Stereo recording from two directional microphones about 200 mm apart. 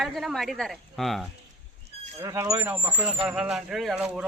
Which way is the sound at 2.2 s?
15° right (ahead or behind).